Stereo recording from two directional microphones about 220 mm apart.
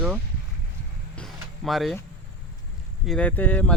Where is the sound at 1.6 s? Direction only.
Centre (ahead or behind).